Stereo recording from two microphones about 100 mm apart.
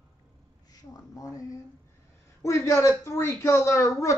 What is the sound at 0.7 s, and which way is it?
A woman's voice, 40° left (ahead or behind).